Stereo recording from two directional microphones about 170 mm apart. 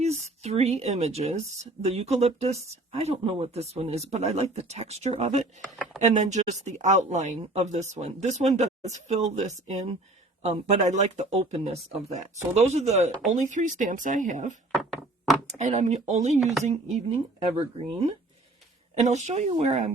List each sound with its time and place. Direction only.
0.0 s speech: 40° right (ahead or behind)